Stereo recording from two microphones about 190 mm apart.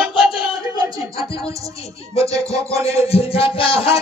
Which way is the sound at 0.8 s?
20° right (ahead or behind).